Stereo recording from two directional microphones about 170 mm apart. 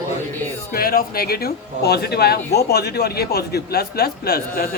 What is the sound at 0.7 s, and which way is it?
Speech, 60° left (ahead or behind).